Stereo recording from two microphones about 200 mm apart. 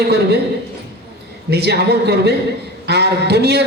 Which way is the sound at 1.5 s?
55° right (ahead or behind).